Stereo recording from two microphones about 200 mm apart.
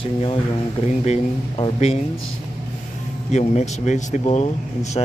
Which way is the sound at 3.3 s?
35° left (ahead or behind).